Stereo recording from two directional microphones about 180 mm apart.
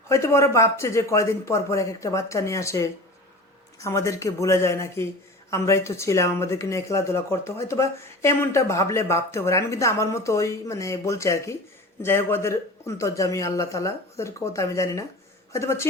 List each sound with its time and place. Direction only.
0.1 s speech: 15° left (ahead or behind)